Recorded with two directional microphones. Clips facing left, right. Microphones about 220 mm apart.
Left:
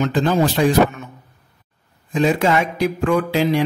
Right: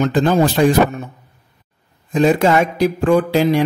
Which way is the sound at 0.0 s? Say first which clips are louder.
Right 3 dB; 45° right (ahead or behind).